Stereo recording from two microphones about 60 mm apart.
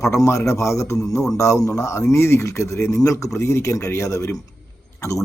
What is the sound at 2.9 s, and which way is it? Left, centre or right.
Speech, left.